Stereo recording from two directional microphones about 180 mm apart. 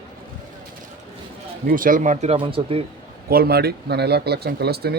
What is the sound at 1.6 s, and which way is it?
Speech, 50° right (ahead or behind).